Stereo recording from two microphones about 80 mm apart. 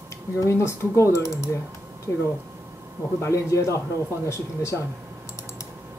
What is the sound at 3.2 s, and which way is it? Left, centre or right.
Speech, left.